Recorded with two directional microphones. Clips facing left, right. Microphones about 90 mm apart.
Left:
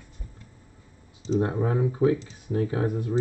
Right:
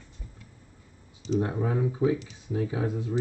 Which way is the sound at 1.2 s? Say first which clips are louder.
Left 3 dB; 35° left (ahead or behind).